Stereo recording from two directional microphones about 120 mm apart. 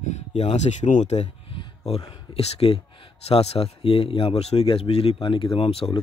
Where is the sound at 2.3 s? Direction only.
60° left (ahead or behind).